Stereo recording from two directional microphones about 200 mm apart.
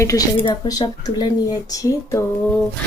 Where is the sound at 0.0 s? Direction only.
15° left (ahead or behind).